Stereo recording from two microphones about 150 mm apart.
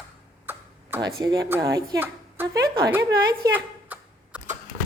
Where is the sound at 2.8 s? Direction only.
25° right (ahead or behind).